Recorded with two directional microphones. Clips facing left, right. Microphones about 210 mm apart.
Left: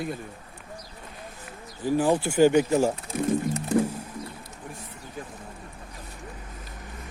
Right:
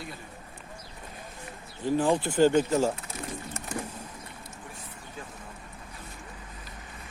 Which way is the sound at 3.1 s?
55° left (ahead or behind).